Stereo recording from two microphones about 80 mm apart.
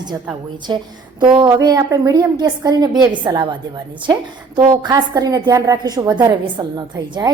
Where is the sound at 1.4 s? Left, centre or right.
Right.